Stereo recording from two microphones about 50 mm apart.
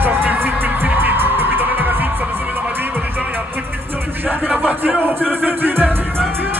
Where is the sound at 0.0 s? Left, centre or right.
Right.